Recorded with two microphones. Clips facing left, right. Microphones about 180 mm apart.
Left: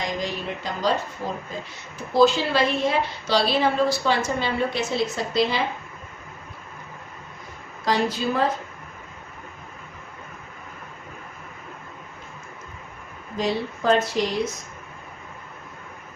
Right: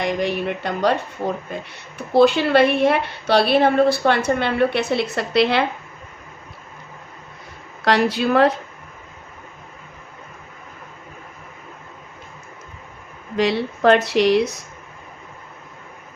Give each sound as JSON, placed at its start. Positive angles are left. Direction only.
{"t": 0.0, "sound": "a woman's voice", "side_deg": -65}
{"t": 7.9, "sound": "speech", "side_deg": -70}
{"t": 13.3, "sound": "speech", "side_deg": -75}